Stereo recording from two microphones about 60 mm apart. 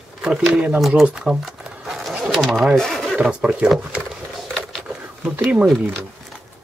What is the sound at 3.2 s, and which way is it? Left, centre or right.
Speech, centre.